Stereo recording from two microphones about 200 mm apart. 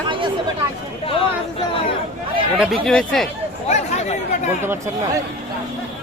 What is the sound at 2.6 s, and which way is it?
Speech, centre (ahead or behind).